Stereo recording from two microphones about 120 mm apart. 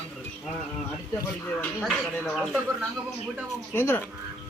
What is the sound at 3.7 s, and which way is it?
Speech, 20° left (ahead or behind).